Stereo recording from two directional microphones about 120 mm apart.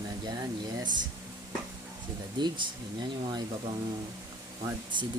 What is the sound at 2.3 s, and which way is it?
Speech, 40° right (ahead or behind).